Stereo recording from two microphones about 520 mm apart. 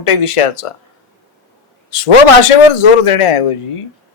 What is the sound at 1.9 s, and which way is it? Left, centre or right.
Speech, left.